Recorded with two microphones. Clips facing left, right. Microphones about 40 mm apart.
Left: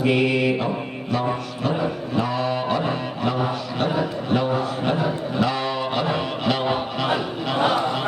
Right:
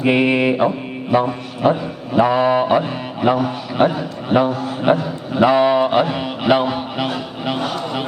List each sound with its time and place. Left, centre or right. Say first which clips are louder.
0.0 s a man's voice: right 4 dB; right
6.1 s music: right 6 dB; centre